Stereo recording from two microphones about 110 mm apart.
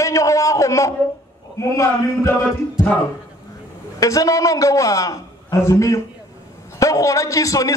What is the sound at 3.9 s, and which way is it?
A man's voice, 30° left (ahead or behind).